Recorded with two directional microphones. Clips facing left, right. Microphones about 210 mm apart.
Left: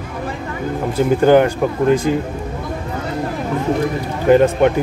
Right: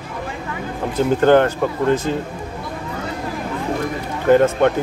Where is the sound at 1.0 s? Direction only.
10° left (ahead or behind).